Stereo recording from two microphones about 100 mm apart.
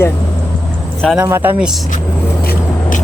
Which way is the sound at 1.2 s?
25° right (ahead or behind).